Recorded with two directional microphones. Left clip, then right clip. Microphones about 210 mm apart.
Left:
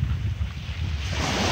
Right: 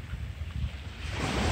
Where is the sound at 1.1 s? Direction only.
40° left (ahead or behind).